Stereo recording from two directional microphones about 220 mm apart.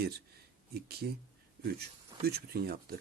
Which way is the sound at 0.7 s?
45° right (ahead or behind).